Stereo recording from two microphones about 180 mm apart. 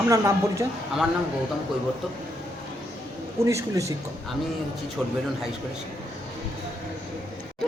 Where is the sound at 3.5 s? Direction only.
15° right (ahead or behind).